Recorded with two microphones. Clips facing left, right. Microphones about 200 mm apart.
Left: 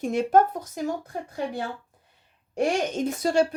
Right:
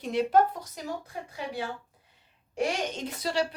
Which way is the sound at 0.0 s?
45° left (ahead or behind).